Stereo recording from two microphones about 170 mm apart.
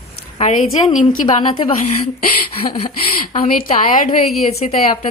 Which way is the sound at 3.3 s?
45° left (ahead or behind).